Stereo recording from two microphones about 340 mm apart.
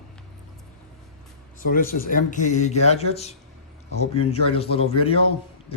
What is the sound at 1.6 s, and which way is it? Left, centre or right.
A man's voice, left.